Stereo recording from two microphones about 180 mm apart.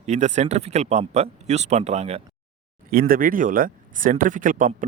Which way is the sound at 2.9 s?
55° right (ahead or behind).